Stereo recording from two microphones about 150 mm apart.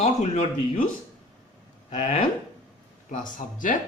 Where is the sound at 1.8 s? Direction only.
45° left (ahead or behind).